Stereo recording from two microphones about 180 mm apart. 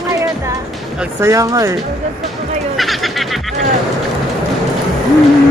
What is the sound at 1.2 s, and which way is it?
Speech, 15° right (ahead or behind).